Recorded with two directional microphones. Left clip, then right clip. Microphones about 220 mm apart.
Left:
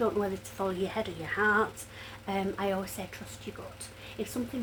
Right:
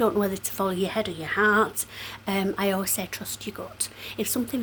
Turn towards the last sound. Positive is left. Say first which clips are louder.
# right 7 dB
turn(degrees=-50)  # may be behind; listen again after turning